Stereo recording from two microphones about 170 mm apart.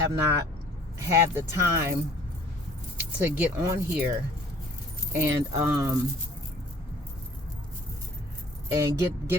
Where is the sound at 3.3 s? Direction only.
15° right (ahead or behind).